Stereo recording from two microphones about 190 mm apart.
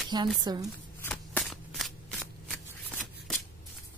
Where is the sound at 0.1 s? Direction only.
20° right (ahead or behind).